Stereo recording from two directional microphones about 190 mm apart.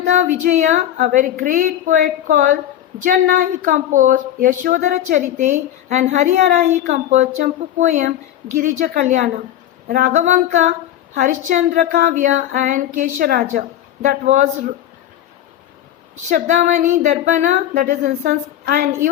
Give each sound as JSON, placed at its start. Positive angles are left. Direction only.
{"t": 0.1, "sound": "a woman's voice", "side_deg": -40}
{"t": 7.4, "sound": "female singing", "side_deg": -40}
{"t": 8.8, "sound": "a woman's voice", "side_deg": -45}
{"t": 9.9, "sound": "female singing", "side_deg": -40}
{"t": 11.2, "sound": "a woman's voice", "side_deg": -40}
{"t": 16.3, "sound": "a woman's voice", "side_deg": -45}